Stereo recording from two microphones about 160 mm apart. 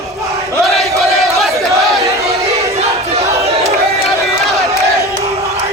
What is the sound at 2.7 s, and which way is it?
Battle cry, 40° right (ahead or behind).